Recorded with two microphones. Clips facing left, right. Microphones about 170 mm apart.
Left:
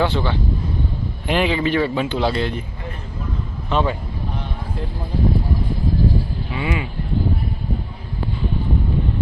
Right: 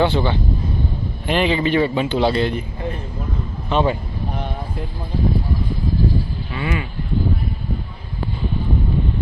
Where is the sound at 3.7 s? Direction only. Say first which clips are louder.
Right 2 dB; 25° right (ahead or behind).